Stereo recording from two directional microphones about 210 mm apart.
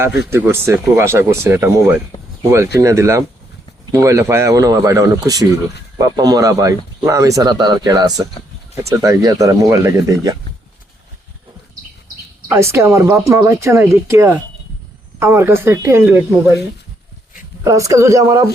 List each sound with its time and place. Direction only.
0.3 s speech: 10° right (ahead or behind)
12.5 s speech: 10° right (ahead or behind)